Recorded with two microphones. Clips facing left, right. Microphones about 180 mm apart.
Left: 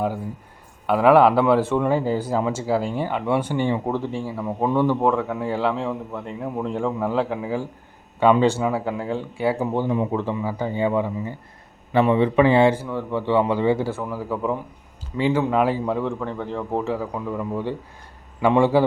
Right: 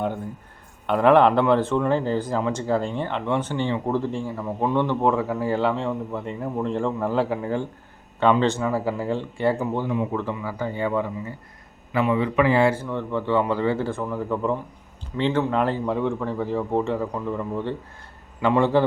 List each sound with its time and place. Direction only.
0.9 s speech: 5° left (ahead or behind)
8.8 s speech: centre (ahead or behind)
9.6 s speech: 25° left (ahead or behind)
11.9 s a man's voice: 30° left (ahead or behind)
12.8 s speech: 10° left (ahead or behind)